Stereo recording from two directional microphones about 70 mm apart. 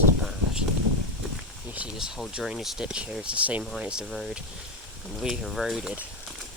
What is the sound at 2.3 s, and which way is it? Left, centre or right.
Speech, centre.